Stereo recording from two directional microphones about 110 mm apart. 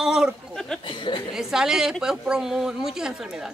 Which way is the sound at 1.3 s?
5° right (ahead or behind).